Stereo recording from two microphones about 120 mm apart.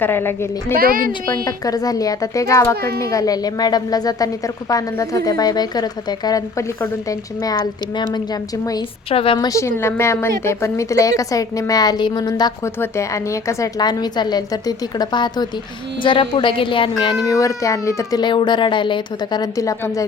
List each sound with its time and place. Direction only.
0.0 s a child's voice: 20° left (ahead or behind)
1.5 s a child's voice: 30° left (ahead or behind)
9.0 s a woman's voice: 50° left (ahead or behind)
9.5 s a woman's voice: 25° left (ahead or behind); by 17.2 s 45° left (ahead or behind)
17.2 s a woman's voice: 25° left (ahead or behind)
18.2 s a child's voice: 40° left (ahead or behind)